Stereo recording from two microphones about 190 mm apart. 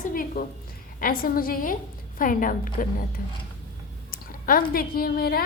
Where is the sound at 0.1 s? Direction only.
45° left (ahead or behind).